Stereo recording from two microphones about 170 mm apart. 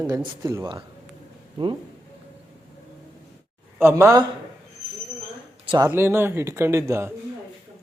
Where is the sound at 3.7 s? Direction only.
15° right (ahead or behind).